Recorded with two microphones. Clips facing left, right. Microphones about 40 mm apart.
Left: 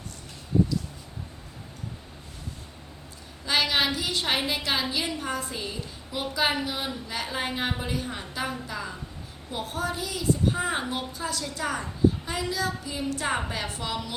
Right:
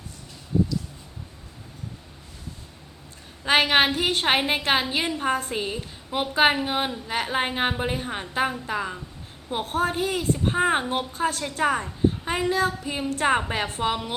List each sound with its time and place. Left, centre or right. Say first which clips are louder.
3.4 s a woman's voice: right 5 dB; right